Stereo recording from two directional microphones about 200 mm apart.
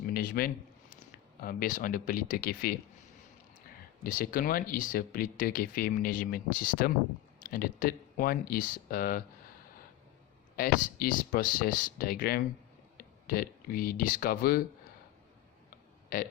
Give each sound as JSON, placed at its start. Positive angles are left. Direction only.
{"t": 0.1, "sound": "a sound", "side_deg": 45}
{"t": 1.4, "sound": "speech", "side_deg": 45}
{"t": 4.0, "sound": "speech", "side_deg": 45}
{"t": 10.6, "sound": "speech", "side_deg": 45}
{"t": 16.1, "sound": "speech", "side_deg": 45}